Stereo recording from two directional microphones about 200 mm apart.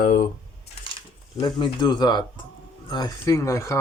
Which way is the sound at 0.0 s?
45° left (ahead or behind).